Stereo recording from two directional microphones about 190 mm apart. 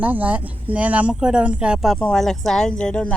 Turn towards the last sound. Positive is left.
turn(degrees=5)  # may be behind; listen again after turning